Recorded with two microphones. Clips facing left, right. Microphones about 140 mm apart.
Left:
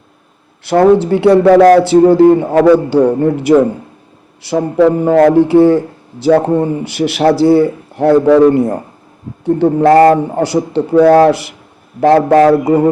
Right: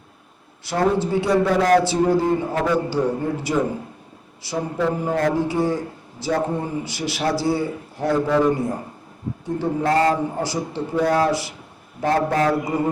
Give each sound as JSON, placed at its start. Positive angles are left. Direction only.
{"t": 0.6, "sound": "speech", "side_deg": 65}
{"t": 4.4, "sound": "a man's voice", "side_deg": 80}